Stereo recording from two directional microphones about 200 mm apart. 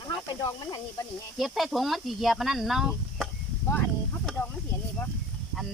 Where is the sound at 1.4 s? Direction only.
Centre (ahead or behind).